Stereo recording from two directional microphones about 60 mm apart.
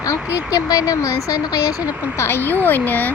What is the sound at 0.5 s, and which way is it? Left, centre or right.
Speech, left.